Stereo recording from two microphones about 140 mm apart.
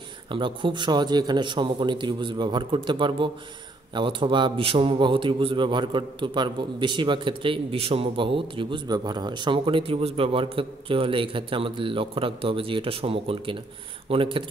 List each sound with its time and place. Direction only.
0.3 s a man's voice: 35° right (ahead or behind)